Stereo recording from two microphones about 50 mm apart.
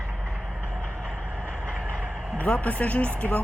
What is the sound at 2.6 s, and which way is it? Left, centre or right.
Speech, left.